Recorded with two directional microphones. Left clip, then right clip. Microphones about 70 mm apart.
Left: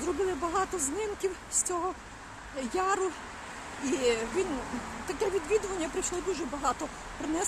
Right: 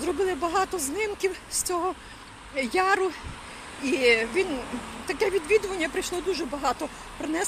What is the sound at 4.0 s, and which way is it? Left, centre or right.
Speech, centre.